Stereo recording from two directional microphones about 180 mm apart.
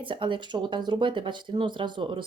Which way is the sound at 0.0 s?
25° right (ahead or behind).